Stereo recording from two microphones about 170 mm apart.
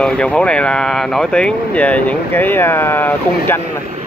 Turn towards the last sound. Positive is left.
turn(degrees=10)  # may be behind; listen again after turning